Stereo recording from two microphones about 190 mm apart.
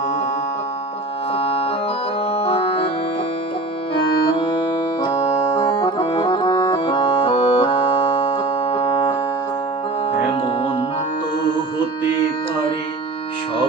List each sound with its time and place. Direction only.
1.3 s music: 30° left (ahead or behind)
3.9 s music: 25° left (ahead or behind)